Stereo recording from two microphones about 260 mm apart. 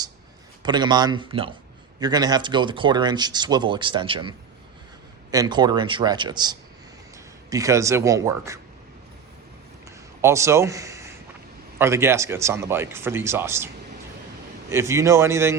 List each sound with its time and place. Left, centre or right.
0.6 s speech: centre
10.2 s a man's voice: centre
14.7 s speech: centre